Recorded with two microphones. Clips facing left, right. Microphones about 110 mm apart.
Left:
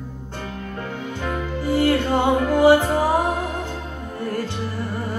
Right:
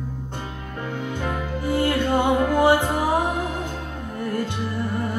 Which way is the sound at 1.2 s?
20° right (ahead or behind).